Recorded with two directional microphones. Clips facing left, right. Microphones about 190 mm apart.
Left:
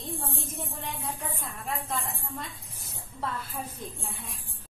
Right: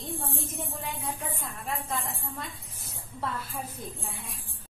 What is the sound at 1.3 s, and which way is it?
Speech, centre (ahead or behind).